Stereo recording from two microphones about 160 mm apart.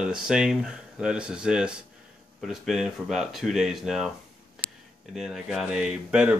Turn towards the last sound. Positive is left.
turn(degrees=-5)  # may be behind; listen again after turning